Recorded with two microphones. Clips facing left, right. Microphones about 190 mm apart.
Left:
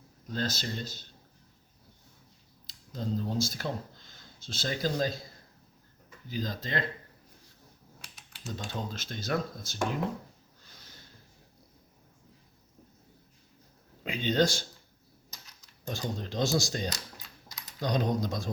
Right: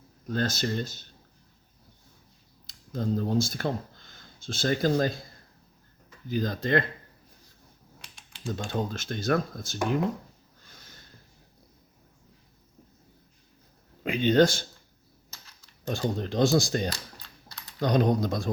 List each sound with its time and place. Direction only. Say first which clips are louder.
0.3 s speech: right 5 dB; 50° right (ahead or behind)
2.6 s speech: right 5 dB; 55° right (ahead or behind)
6.2 s speech: right 7 dB; 55° right (ahead or behind)
8.4 s speech: right 6 dB; 55° right (ahead or behind)
10.7 s a sound: right 2 dB; 50° right (ahead or behind)
14.0 s speech: right 6 dB; 55° right (ahead or behind)
15.9 s speech: right 6 dB; 55° right (ahead or behind)